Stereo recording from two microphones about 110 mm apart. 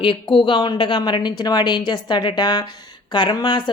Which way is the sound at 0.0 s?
50° left (ahead or behind).